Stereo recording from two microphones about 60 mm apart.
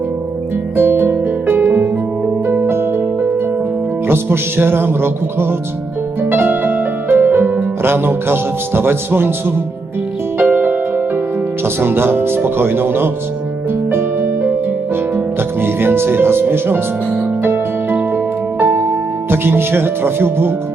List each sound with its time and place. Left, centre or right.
0.8 s harp: right
2.5 s music: right
10.3 s music: right